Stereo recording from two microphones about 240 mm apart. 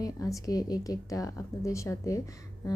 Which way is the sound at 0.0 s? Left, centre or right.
Centre.